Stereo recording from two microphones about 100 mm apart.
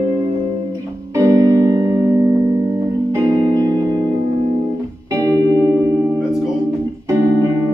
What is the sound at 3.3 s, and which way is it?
Music, 35° right (ahead or behind).